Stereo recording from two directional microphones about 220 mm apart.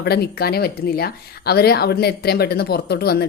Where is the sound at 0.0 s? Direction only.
45° left (ahead or behind).